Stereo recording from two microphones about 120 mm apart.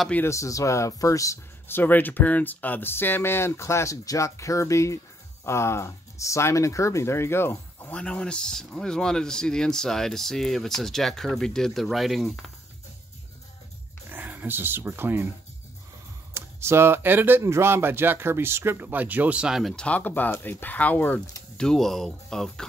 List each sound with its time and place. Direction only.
0.1 s speech: 20° left (ahead or behind)
8.0 s speech: 5° left (ahead or behind)
14.0 s speech: 15° right (ahead or behind)
16.3 s speech: 20° right (ahead or behind); by 22.7 s 5° left (ahead or behind)